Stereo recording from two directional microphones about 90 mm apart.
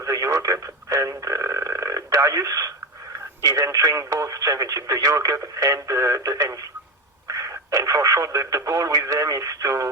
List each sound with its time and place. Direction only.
0.0 s telephone: 35° right (ahead or behind)
3.4 s speech: 40° right (ahead or behind)